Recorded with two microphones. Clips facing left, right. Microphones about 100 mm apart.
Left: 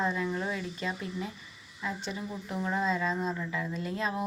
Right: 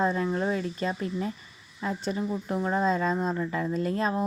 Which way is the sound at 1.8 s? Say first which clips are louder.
Right 6 dB; 40° right (ahead or behind).